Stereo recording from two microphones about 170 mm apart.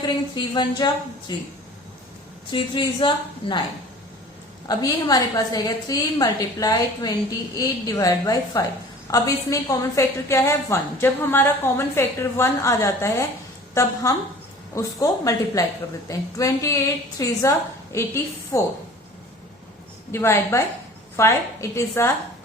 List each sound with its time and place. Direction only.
0.3 s a woman's voice: 25° left (ahead or behind)
2.5 s a woman's voice: 30° left (ahead or behind)
4.7 s a woman's voice: 20° left (ahead or behind)
20.1 s a woman's voice: 15° left (ahead or behind)